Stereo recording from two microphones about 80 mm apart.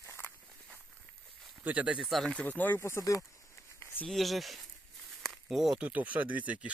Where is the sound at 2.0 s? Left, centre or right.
Centre.